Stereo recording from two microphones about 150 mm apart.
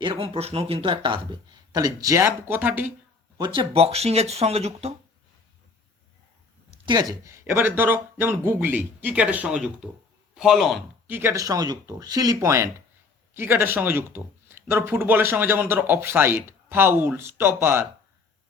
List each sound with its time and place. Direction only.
0.0 s a man's voice: 35° right (ahead or behind); by 2.9 s 10° right (ahead or behind)
3.3 s speech: 30° right (ahead or behind)
6.8 s a man's voice: 25° right (ahead or behind); by 11.1 s centre (ahead or behind)
11.1 s speech: 15° right (ahead or behind)